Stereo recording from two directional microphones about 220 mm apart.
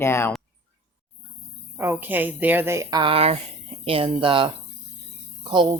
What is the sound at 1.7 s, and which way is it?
Speech, 10° right (ahead or behind).